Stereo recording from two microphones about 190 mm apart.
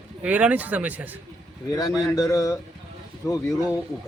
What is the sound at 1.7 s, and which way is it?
A man's voice, 20° left (ahead or behind).